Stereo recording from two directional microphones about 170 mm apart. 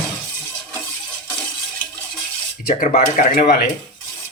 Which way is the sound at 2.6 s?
60° left (ahead or behind).